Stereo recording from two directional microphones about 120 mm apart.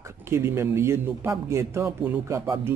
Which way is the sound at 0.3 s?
20° right (ahead or behind).